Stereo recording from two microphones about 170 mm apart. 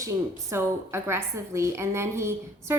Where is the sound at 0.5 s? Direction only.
15° right (ahead or behind).